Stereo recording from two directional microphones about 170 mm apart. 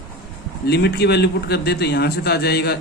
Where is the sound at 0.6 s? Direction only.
70° left (ahead or behind).